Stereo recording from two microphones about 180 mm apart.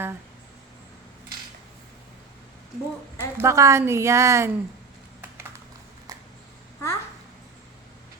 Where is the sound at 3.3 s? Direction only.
15° right (ahead or behind).